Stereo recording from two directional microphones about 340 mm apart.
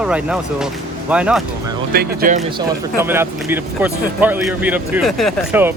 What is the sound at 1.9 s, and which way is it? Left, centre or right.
Speech, right.